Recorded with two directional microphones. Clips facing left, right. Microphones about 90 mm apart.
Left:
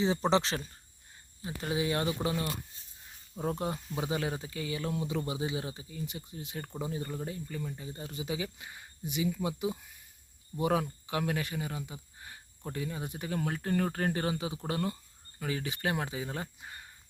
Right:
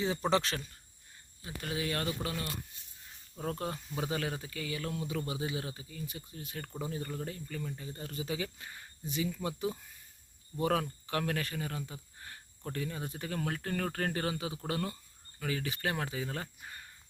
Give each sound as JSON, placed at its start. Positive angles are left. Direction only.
{"t": 0.0, "sound": "speech", "side_deg": 25}
{"t": 3.8, "sound": "speech", "side_deg": 5}
{"t": 4.0, "sound": "speech", "side_deg": 20}